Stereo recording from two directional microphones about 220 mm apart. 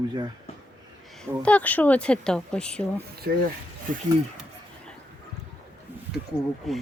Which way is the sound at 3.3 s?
45° right (ahead or behind).